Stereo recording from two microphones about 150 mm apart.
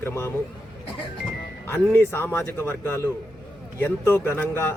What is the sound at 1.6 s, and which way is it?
A man's voice, 15° left (ahead or behind).